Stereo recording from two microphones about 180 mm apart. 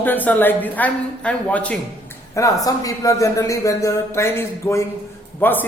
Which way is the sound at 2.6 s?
20° left (ahead or behind).